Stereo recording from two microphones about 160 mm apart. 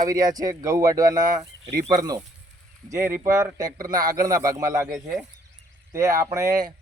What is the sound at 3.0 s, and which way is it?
Speech, 10° right (ahead or behind).